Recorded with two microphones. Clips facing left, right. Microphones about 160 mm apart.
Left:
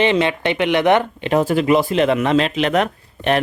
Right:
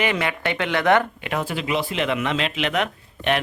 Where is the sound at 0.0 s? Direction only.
25° left (ahead or behind).